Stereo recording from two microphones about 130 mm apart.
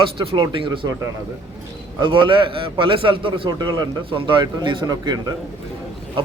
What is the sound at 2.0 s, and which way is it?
A man's voice, 35° right (ahead or behind).